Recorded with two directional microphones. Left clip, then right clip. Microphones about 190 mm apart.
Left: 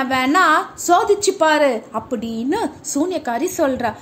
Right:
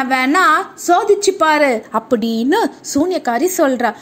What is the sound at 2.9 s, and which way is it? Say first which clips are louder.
A woman's voice: right 4 dB; 20° right (ahead or behind).